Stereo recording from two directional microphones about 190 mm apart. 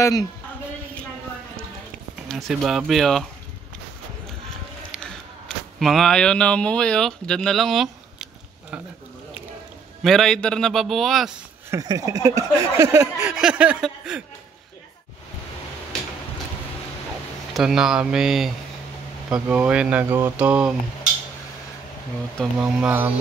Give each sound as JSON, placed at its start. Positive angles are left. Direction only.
{"t": 0.0, "sound": "a man's voice", "side_deg": 20}
{"t": 2.2, "sound": "a man's voice", "side_deg": 0}
{"t": 5.8, "sound": "speech", "side_deg": 0}
{"t": 10.0, "sound": "a man's voice", "side_deg": 0}
{"t": 11.7, "sound": "speech", "side_deg": -20}
{"t": 17.6, "sound": "a man's voice", "side_deg": -5}
{"t": 22.4, "sound": "speech", "side_deg": -5}